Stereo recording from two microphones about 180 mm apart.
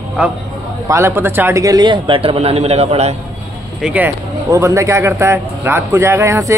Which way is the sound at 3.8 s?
10° right (ahead or behind).